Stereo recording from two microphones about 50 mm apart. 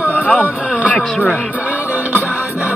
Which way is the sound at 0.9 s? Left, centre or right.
Centre.